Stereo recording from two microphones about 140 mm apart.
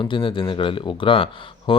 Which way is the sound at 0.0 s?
35° left (ahead or behind).